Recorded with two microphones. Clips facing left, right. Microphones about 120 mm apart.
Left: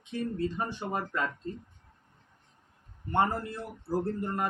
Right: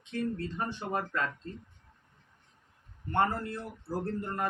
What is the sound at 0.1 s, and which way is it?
Speech, 10° left (ahead or behind).